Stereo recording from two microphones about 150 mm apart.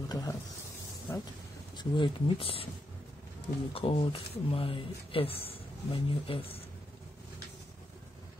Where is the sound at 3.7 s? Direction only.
40° left (ahead or behind).